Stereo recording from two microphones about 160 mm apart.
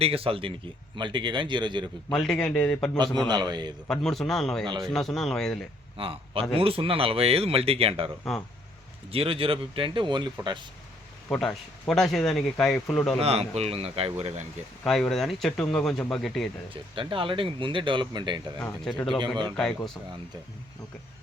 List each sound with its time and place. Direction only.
0.0 s speech: 35° right (ahead or behind)
2.0 s speech: 5° left (ahead or behind)
3.2 s speech: 25° right (ahead or behind)
3.8 s speech: 5° left (ahead or behind)
4.6 s speech: 30° right (ahead or behind)
4.9 s speech: centre (ahead or behind)
6.0 s a man's voice: 35° right (ahead or behind)
9.1 s speech: 35° right (ahead or behind)
11.3 s speech: 5° left (ahead or behind)
13.1 s speech: 40° right (ahead or behind)
14.8 s speech: centre (ahead or behind)
16.7 s speech: 35° right (ahead or behind)
19.5 s speech: 5° left (ahead or behind)